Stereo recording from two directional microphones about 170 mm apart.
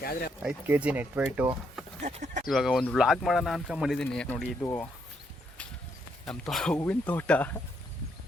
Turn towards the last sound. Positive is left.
turn(degrees=10)  # may be behind; listen again after turning